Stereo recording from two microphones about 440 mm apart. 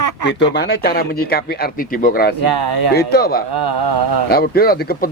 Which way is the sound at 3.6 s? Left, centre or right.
Right.